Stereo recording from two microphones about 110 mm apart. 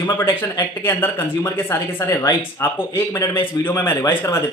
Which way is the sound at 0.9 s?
20° left (ahead or behind).